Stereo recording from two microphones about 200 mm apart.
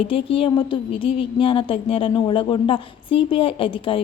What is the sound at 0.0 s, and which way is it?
A woman's voice, 25° left (ahead or behind).